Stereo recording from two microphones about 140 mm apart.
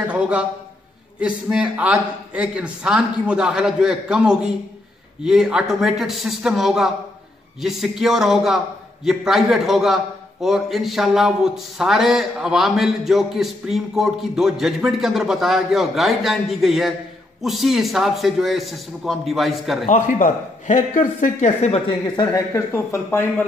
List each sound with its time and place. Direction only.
0.0 s a man's voice: 10° right (ahead or behind)
19.9 s speech: 65° left (ahead or behind); by 23.2 s 20° left (ahead or behind)